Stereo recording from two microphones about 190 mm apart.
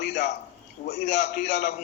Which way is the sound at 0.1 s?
35° left (ahead or behind).